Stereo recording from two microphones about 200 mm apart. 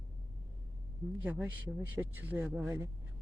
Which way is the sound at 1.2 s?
10° right (ahead or behind).